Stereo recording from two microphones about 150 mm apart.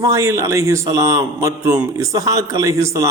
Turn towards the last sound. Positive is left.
turn(degrees=-20)  # may be behind; listen again after turning